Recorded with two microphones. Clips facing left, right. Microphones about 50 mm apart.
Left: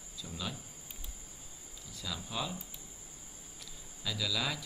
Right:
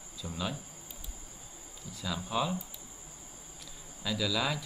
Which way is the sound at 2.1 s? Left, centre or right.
Centre.